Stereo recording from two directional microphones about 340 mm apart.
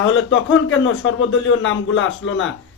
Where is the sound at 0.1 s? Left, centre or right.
Left.